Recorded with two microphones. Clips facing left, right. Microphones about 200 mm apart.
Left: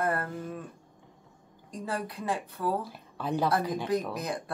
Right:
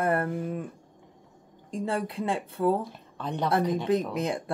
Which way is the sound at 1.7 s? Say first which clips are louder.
Right 5 dB; 25° right (ahead or behind).